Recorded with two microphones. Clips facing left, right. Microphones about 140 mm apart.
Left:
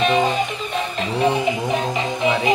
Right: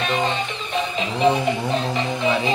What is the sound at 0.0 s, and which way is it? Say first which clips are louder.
Music: left 5 dB; 15° left (ahead or behind).